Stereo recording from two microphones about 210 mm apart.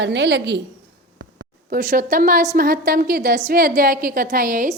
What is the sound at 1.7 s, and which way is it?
A woman's voice, 45° right (ahead or behind).